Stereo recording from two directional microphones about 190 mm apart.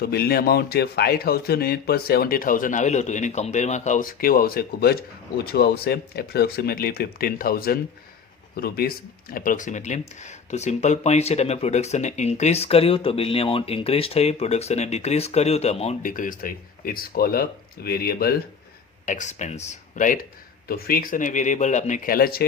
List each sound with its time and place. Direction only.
0.0 s a man's voice: 55° left (ahead or behind)
19.0 s a man's voice: 40° left (ahead or behind)